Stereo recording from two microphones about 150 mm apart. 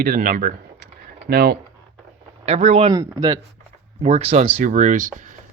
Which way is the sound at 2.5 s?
45° right (ahead or behind).